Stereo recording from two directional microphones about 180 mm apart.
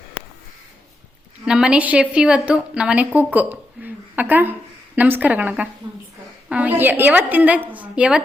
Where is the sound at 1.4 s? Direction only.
5° right (ahead or behind).